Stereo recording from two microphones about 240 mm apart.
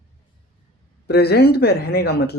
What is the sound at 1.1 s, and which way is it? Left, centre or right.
Speech, left.